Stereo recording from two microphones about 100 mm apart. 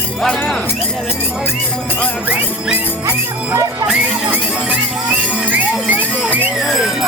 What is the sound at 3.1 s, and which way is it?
Speech, 25° right (ahead or behind).